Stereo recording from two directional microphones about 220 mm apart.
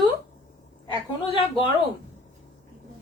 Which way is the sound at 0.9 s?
20° left (ahead or behind).